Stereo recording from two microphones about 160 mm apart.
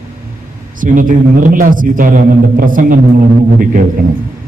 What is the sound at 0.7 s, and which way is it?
A man's voice, 55° right (ahead or behind).